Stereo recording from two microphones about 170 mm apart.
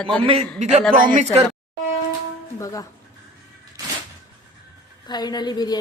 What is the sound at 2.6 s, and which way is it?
Speech, 20° left (ahead or behind).